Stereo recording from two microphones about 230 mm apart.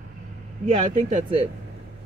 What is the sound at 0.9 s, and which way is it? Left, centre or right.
Speech, right.